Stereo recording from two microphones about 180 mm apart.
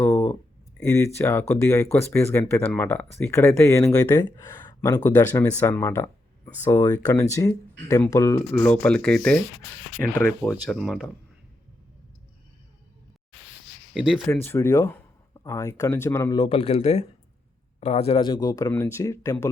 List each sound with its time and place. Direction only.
0.0 s a sound: 15° left (ahead or behind)
0.9 s speech: 15° left (ahead or behind); by 11.1 s centre (ahead or behind)
13.9 s speech: centre (ahead or behind)
14.3 s speech: 15° left (ahead or behind)
16.4 s a man's voice: 30° left (ahead or behind); by 19.5 s 15° left (ahead or behind)